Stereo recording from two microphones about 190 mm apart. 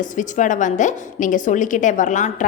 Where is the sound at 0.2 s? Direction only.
40° left (ahead or behind).